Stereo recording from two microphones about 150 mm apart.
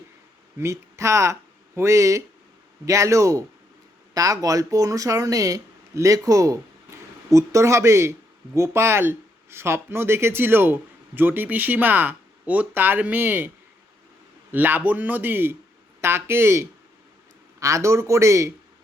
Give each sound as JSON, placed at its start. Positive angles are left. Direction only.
{"t": 0.6, "sound": "speech", "side_deg": -20}
{"t": 14.5, "sound": "speech", "side_deg": -10}